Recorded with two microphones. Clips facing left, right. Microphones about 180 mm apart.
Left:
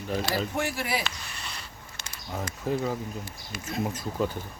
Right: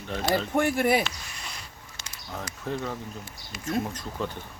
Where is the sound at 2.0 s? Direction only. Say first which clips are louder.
Left 1 dB; 55° left (ahead or behind).